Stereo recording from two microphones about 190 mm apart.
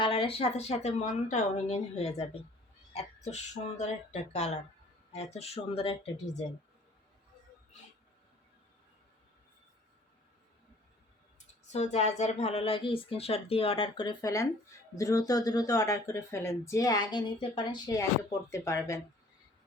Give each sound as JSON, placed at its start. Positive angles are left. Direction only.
{"t": 0.0, "sound": "speech", "side_deg": 30}
{"t": 11.3, "sound": "speech", "side_deg": 35}